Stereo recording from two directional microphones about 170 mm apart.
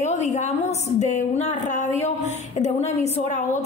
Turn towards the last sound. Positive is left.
turn(degrees=40)  # may be behind; listen again after turning